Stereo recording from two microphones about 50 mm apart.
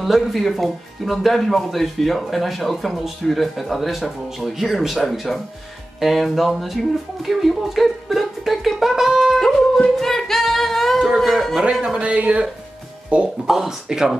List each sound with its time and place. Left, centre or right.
0.0 s speech: centre
9.4 s singing: centre
11.8 s speech: right
13.5 s speech: centre